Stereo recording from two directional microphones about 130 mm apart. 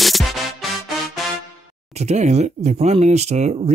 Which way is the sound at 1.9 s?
60° right (ahead or behind).